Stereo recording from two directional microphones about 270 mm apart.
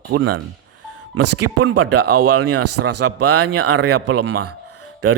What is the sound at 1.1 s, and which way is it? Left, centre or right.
Speech, right.